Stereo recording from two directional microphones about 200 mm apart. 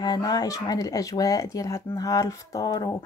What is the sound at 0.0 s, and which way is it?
Speech, 20° left (ahead or behind).